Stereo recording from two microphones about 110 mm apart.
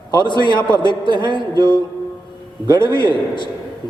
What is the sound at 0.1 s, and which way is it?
A man's voice, 45° left (ahead or behind).